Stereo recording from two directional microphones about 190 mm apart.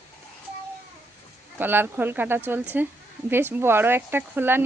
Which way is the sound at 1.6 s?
10° right (ahead or behind).